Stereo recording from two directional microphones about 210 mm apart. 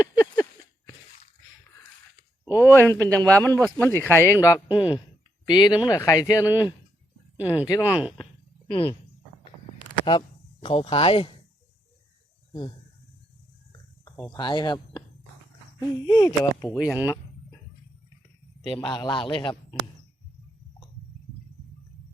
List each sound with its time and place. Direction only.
0.0 s a sound: 15° left (ahead or behind)
2.4 s speech: 15° left (ahead or behind)
7.7 s speech: 15° left (ahead or behind)
8.2 s a sound: 25° left (ahead or behind)
14.3 s speech: 20° left (ahead or behind)
16.0 s speech: 20° left (ahead or behind)
16.7 s speech: 5° right (ahead or behind)
18.9 s speech: 20° left (ahead or behind)